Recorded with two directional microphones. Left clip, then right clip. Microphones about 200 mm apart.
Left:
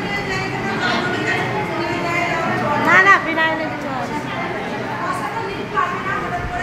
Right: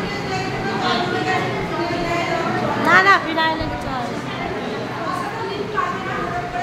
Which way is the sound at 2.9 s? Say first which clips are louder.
Left 1 dB; centre (ahead or behind).